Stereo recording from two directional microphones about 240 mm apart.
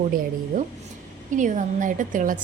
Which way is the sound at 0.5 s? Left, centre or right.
Right.